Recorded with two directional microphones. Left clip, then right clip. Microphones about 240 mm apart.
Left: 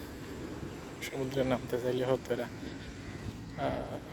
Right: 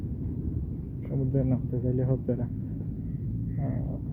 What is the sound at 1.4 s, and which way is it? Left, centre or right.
Speech, left.